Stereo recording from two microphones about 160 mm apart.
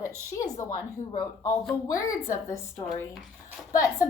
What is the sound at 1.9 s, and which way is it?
A woman's voice, 20° left (ahead or behind).